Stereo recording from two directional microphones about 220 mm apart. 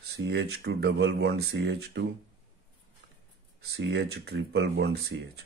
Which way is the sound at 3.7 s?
50° right (ahead or behind).